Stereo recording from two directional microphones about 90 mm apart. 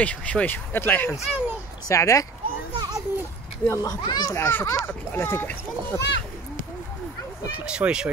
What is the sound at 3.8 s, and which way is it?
Speech, 45° left (ahead or behind).